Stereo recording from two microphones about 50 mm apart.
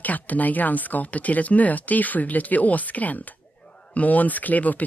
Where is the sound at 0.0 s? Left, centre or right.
Left.